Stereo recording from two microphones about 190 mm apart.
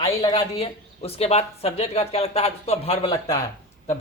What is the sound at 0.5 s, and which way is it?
Speech, 30° left (ahead or behind).